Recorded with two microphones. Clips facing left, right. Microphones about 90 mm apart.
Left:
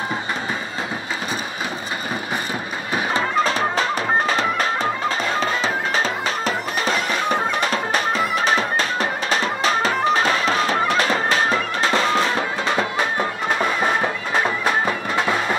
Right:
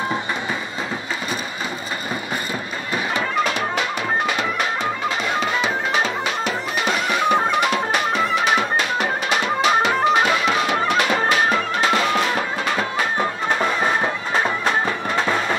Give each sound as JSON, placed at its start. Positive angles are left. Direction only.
{"t": 3.1, "sound": "music", "side_deg": 35}